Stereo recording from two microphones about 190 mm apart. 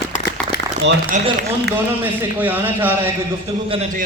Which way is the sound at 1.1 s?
40° right (ahead or behind).